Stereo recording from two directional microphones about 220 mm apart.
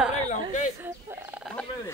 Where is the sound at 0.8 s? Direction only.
5° right (ahead or behind).